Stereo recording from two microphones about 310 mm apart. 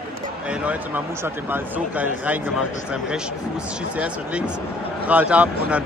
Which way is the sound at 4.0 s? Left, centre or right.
Centre.